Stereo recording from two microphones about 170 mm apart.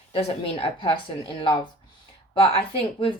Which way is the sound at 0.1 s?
35° left (ahead or behind).